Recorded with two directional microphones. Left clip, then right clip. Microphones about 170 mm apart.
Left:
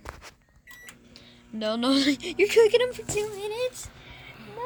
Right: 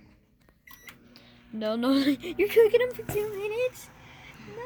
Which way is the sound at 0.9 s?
Centre (ahead or behind).